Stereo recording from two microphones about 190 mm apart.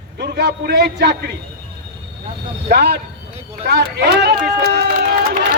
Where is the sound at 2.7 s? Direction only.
55° right (ahead or behind).